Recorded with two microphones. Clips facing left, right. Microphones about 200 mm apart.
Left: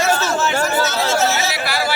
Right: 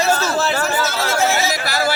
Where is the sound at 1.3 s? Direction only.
40° right (ahead or behind).